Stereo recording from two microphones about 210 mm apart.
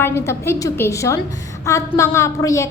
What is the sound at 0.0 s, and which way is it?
A woman's voice, 10° left (ahead or behind).